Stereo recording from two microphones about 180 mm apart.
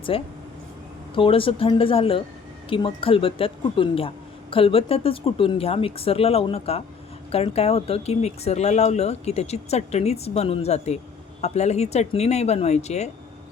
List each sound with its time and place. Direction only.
0.1 s speech: 30° left (ahead or behind)